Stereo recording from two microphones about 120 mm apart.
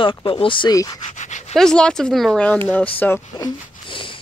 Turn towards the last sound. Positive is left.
turn(degrees=45)  # may be behind; listen again after turning